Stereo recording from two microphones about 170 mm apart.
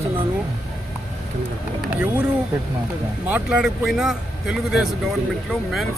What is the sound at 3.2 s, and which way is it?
A man's voice, 5° right (ahead or behind).